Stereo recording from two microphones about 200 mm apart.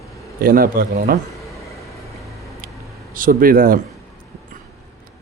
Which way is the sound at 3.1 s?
45° right (ahead or behind).